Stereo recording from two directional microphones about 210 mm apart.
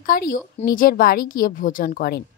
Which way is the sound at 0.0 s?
45° left (ahead or behind).